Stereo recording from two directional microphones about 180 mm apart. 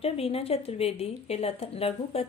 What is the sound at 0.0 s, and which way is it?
A woman's voice, 35° left (ahead or behind).